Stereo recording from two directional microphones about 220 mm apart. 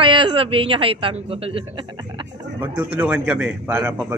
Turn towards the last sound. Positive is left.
turn(degrees=-5)  # may be behind; listen again after turning